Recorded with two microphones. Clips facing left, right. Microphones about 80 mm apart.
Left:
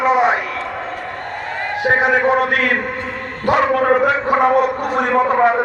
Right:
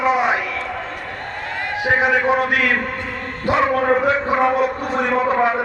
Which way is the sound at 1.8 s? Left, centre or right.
Left.